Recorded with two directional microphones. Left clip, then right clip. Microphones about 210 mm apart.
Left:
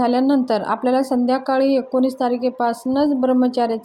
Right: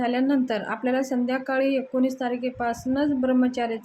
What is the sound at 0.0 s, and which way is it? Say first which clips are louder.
Speech: left 6 dB; 25° left (ahead or behind).